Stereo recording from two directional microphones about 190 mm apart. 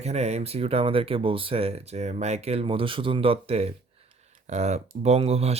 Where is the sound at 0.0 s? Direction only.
35° right (ahead or behind).